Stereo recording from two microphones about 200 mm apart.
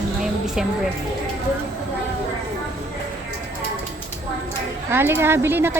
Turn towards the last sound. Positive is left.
turn(degrees=-10)  # may be behind; listen again after turning